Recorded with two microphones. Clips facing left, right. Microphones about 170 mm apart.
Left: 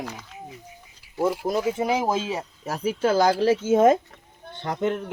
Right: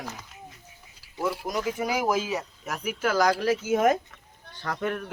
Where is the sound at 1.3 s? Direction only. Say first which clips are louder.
Left 4 dB; 25° left (ahead or behind).